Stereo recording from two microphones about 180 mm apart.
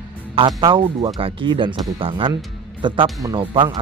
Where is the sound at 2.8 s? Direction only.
25° right (ahead or behind).